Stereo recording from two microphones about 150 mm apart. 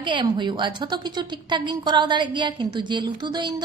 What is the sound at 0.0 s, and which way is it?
A woman's voice, 30° right (ahead or behind).